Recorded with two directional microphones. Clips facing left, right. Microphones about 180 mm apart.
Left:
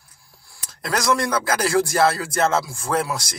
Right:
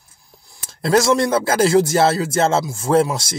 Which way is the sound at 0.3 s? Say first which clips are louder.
Right 2 dB; 20° right (ahead or behind).